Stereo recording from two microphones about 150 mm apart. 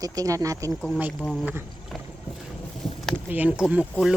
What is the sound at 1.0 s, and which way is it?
Speech, 10° right (ahead or behind).